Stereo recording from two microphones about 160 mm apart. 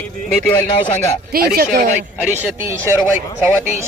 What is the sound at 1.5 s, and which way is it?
Speech, 70° right (ahead or behind).